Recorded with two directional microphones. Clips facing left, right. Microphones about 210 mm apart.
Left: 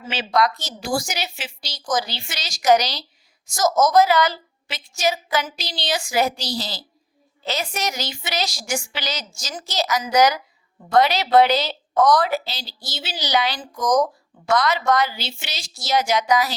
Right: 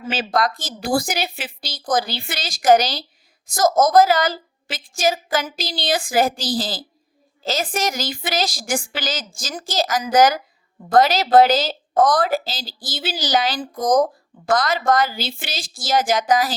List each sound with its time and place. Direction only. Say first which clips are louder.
0.1 s a woman's voice: even; 45° right (ahead or behind)
13.6 s a woman's voice: right 2 dB; 55° right (ahead or behind)